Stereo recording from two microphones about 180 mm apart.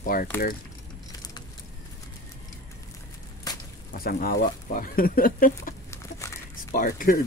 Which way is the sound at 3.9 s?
55° left (ahead or behind).